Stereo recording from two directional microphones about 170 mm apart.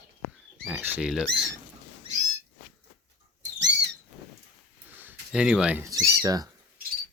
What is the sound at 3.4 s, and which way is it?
Rodents, 90° right.